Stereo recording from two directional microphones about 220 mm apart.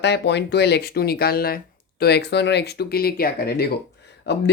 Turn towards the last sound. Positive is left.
turn(degrees=50)  # may be behind; listen again after turning